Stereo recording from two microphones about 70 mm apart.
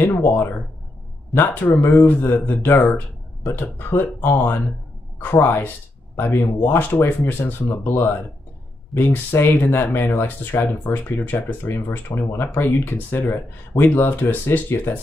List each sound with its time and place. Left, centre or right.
1.3 s speech: left